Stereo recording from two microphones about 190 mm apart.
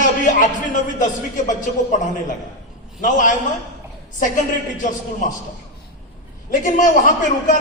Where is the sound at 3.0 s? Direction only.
40° left (ahead or behind).